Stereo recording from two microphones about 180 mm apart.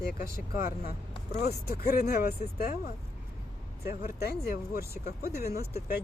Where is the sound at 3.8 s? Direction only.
60° left (ahead or behind).